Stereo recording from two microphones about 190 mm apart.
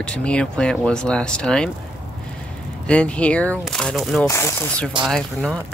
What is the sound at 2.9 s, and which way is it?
Speech, 5° left (ahead or behind).